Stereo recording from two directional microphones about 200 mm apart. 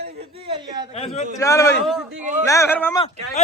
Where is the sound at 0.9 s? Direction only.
30° left (ahead or behind).